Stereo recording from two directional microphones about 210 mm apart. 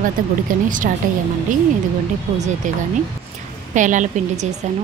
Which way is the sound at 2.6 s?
35° right (ahead or behind).